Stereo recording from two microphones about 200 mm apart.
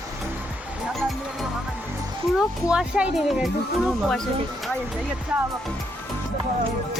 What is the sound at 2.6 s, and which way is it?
Speech, 5° right (ahead or behind).